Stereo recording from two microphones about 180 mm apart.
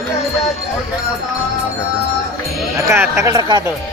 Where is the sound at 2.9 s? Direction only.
15° right (ahead or behind).